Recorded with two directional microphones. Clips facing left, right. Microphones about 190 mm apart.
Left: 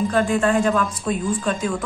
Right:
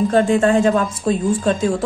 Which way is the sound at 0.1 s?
25° right (ahead or behind).